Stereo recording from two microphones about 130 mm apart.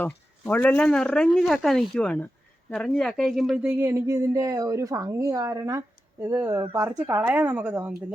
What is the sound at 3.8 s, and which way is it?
A woman's voice, 20° right (ahead or behind).